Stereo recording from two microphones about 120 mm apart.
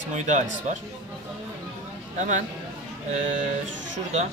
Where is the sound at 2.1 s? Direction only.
90° right.